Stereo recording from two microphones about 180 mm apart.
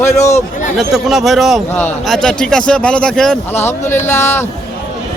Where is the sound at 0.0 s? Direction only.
15° left (ahead or behind).